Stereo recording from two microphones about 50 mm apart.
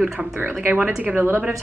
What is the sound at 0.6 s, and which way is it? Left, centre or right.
Speech, right.